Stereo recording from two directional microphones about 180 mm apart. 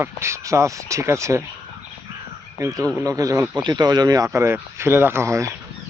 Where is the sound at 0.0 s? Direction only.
15° right (ahead or behind).